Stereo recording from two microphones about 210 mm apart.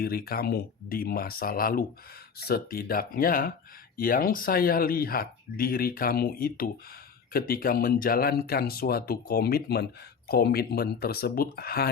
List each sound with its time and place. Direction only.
0.0 s speech: 45° left (ahead or behind)